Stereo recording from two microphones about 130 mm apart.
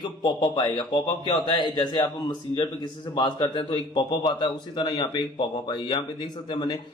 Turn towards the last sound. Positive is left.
turn(degrees=35)  # may be behind; listen again after turning